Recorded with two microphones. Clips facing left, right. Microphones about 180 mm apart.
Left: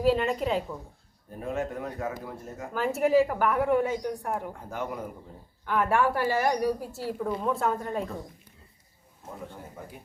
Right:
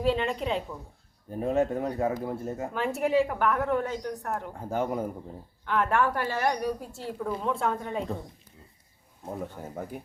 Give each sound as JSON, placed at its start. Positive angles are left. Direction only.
{"t": 0.0, "sound": "a woman's voice", "side_deg": 5}
{"t": 1.4, "sound": "speech", "side_deg": -30}
{"t": 2.7, "sound": "a woman's voice", "side_deg": 0}
{"t": 4.7, "sound": "speech", "side_deg": -30}
{"t": 5.6, "sound": "a woman's voice", "side_deg": 5}